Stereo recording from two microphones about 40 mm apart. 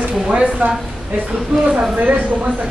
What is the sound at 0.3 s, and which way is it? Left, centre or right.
Speech, right.